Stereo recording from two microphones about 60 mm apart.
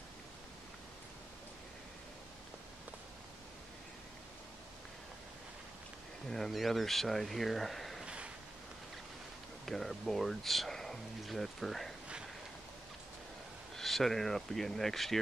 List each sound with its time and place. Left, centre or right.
6.3 s speech: centre
8.0 s a sound: centre
9.7 s speech: centre
13.7 s speech: centre